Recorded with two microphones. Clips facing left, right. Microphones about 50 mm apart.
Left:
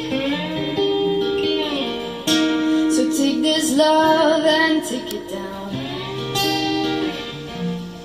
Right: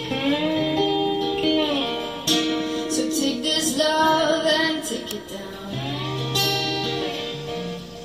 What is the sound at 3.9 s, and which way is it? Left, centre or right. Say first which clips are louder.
Music: left 4 dB; centre.